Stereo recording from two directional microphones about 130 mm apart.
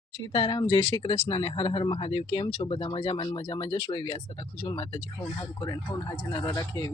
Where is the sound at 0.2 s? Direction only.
35° left (ahead or behind).